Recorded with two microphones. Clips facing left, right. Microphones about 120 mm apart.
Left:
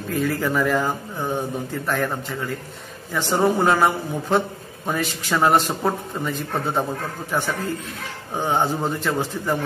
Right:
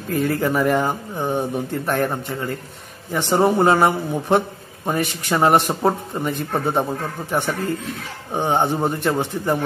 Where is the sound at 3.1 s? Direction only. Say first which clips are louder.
Right 2 dB; 20° right (ahead or behind).